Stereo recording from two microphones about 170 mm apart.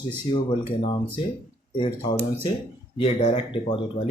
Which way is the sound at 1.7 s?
30° left (ahead or behind).